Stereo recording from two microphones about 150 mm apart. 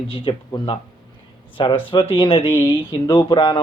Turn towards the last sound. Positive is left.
turn(degrees=30)  # may be behind; listen again after turning